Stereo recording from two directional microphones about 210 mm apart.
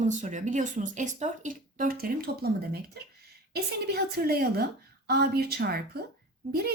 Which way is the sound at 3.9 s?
50° right (ahead or behind).